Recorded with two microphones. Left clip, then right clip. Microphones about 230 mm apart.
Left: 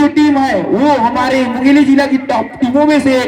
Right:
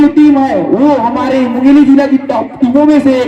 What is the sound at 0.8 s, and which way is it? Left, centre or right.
A man's voice, centre.